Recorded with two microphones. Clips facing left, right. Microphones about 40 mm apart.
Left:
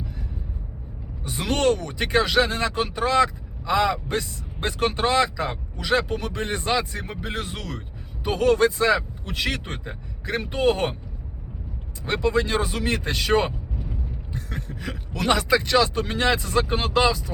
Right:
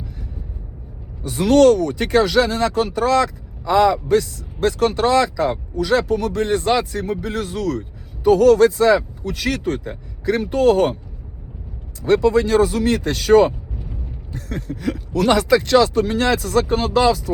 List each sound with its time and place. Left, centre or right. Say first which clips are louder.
1.2 s speech: right 10 dB; left
12.0 s speech: right 7 dB; left
14.3 s vehicle: right 7 dB; left
15.1 s speech: right 5 dB; left